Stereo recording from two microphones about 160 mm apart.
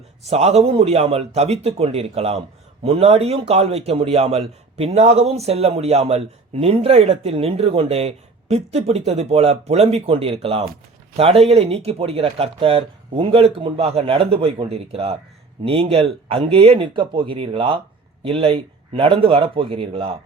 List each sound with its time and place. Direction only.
0.3 s speech: 40° right (ahead or behind)